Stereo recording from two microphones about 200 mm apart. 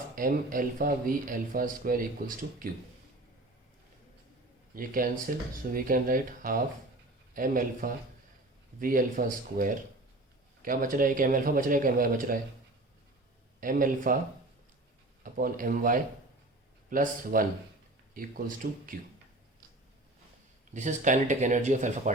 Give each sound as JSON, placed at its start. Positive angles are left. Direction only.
{"t": 0.2, "sound": "speech", "side_deg": -45}
{"t": 4.7, "sound": "speech", "side_deg": -45}
{"t": 13.6, "sound": "speech", "side_deg": -45}
{"t": 15.2, "sound": "speech", "side_deg": -45}
{"t": 20.7, "sound": "speech", "side_deg": -40}